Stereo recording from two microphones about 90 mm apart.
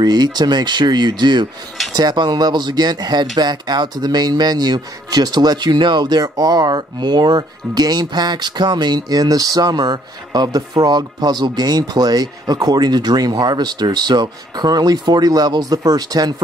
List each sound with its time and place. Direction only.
0.0 s speech: 50° right (ahead or behind)